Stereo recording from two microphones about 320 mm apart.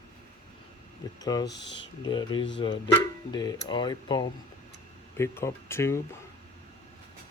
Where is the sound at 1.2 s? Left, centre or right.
Centre.